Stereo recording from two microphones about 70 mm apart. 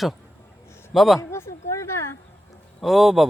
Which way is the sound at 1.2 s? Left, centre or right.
Left.